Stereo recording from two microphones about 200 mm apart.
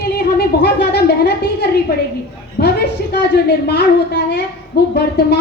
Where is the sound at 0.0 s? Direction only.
55° left (ahead or behind).